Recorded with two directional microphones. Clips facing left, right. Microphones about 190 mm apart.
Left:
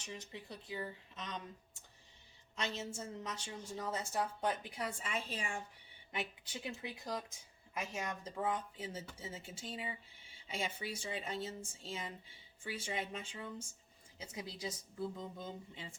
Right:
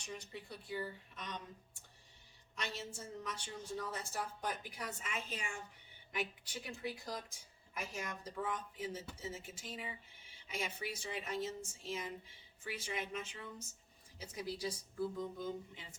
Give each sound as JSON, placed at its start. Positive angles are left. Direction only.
{"t": 0.0, "sound": "speech", "side_deg": 25}
{"t": 2.6, "sound": "speech", "side_deg": 25}
{"t": 6.8, "sound": "speech", "side_deg": 20}